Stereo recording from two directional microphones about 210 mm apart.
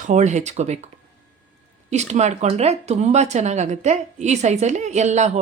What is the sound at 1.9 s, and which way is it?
Speech, 35° right (ahead or behind).